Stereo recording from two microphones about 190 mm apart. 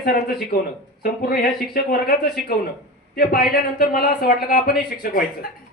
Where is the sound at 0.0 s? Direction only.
55° left (ahead or behind).